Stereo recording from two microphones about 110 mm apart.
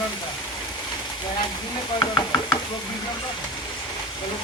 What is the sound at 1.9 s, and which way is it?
Speech, 40° left (ahead or behind).